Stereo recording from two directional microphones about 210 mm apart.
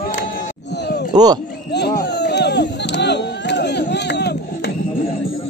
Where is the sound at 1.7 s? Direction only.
50° left (ahead or behind).